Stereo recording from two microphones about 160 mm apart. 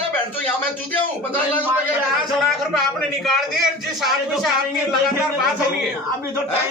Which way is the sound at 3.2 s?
Centre (ahead or behind).